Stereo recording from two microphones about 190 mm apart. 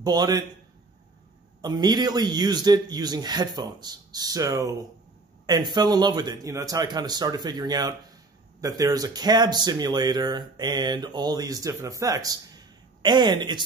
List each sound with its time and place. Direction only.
0.0 s a man's voice: 20° right (ahead or behind)
1.6 s a man's voice: 20° right (ahead or behind)